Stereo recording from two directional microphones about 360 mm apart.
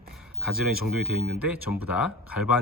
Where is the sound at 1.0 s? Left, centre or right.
Left.